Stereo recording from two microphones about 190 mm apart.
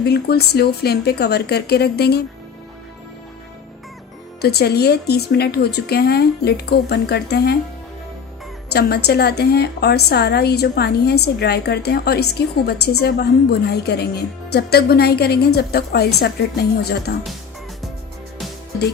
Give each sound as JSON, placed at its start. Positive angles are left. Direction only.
{"t": 0.0, "sound": "a woman's voice", "side_deg": 55}
{"t": 4.4, "sound": "a woman's voice", "side_deg": 55}
{"t": 8.7, "sound": "a woman's voice", "side_deg": 60}